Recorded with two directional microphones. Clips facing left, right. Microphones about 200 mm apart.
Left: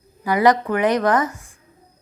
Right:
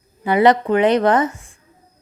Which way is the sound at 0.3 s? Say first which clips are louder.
Right 3 dB; 25° right (ahead or behind).